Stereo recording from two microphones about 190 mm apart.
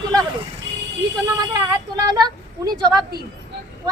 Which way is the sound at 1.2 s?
20° right (ahead or behind).